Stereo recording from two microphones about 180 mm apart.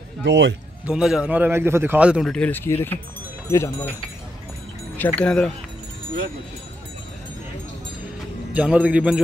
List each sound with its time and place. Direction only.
0.2 s a man's voice: 90° right
0.8 s a man's voice: 5° right (ahead or behind)
2.3 s speech: 10° left (ahead or behind)
4.9 s speech: 10° left (ahead or behind)
8.5 s a man's voice: 5° right (ahead or behind)